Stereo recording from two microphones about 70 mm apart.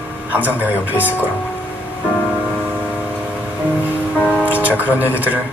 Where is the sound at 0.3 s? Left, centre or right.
Right.